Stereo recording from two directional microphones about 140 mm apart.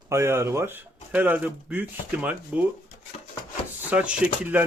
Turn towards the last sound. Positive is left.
turn(degrees=-10)  # may be behind; listen again after turning